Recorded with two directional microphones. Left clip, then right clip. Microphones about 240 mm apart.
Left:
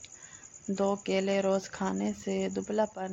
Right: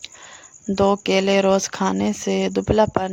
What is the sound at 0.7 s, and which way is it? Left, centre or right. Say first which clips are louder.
Speech: right 12 dB; right.